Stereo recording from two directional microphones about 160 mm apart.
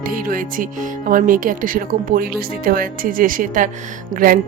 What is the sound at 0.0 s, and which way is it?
Speech, 60° right (ahead or behind).